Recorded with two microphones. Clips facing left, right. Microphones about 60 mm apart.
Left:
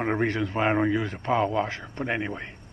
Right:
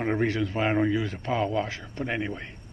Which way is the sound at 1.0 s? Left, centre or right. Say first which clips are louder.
Left 3 dB; left.